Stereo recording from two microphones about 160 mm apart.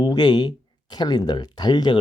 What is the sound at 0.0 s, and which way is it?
Speech, 25° left (ahead or behind).